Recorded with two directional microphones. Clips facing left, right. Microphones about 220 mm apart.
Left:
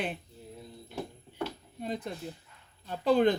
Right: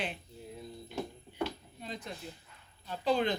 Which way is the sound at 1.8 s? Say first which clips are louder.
Left 7 dB; 55° left (ahead or behind).